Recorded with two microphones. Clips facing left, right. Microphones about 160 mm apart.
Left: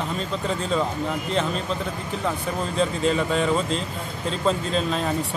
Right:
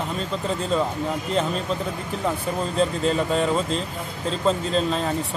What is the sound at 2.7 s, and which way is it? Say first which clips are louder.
Speech: even; centre (ahead or behind).